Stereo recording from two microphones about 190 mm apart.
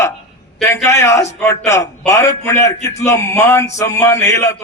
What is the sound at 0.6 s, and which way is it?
Speech, 15° left (ahead or behind).